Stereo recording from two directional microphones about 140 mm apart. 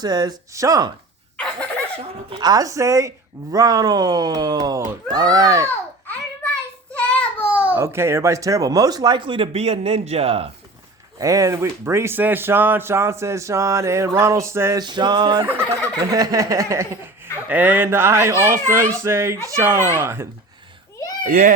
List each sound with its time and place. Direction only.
0.0 s speech: 30° right (ahead or behind)
2.3 s speech: 30° right (ahead or behind)
5.6 s a sound: 10° left (ahead or behind)
6.9 s child singing: 10° left (ahead or behind)
7.5 s speech: 10° right (ahead or behind); by 10.5 s 45° right (ahead or behind)
11.2 s speech: 25° right (ahead or behind)
14.8 s music: 30° right (ahead or behind)
15.4 s a child's voice: 20° right (ahead or behind)
21.2 s a child's voice: 75° right (ahead or behind)